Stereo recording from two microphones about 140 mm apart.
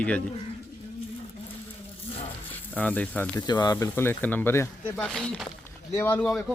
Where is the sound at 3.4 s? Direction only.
30° left (ahead or behind); by 5.4 s 5° left (ahead or behind).